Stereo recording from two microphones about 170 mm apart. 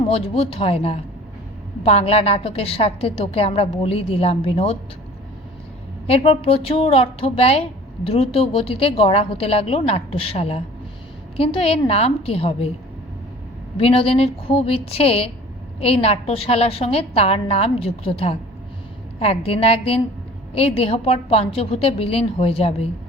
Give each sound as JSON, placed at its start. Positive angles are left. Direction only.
{"t": 0.0, "sound": "a woman's voice", "side_deg": 35}
{"t": 6.1, "sound": "a woman's voice", "side_deg": 35}
{"t": 13.7, "sound": "a woman's voice", "side_deg": 35}